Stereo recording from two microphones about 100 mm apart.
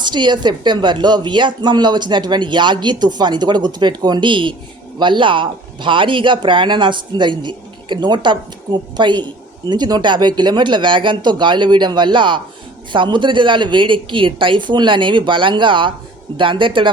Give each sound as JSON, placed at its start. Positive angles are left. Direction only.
{"t": 0.0, "sound": "speech", "side_deg": -50}